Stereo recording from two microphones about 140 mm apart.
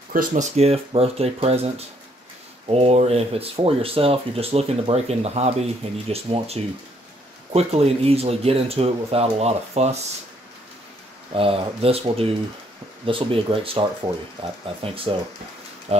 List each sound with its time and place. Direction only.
0.1 s speech: 70° right (ahead or behind); by 9.9 s 50° right (ahead or behind)
11.3 s speech: 40° right (ahead or behind)
15.9 s speech: 50° right (ahead or behind)